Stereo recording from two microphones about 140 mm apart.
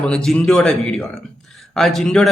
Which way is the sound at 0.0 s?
5° left (ahead or behind).